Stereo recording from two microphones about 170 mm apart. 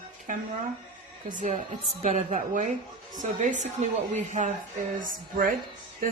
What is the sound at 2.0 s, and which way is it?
A woman's voice, 45° right (ahead or behind).